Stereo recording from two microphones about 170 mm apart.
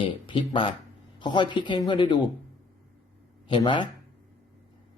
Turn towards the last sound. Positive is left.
turn(degrees=30)  # may be behind; listen again after turning